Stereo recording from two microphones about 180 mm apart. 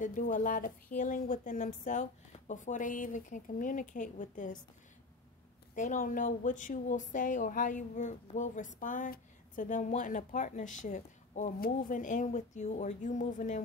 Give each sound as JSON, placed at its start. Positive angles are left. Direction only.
{"t": 0.0, "sound": "speech", "side_deg": 45}
{"t": 5.8, "sound": "speech", "side_deg": 45}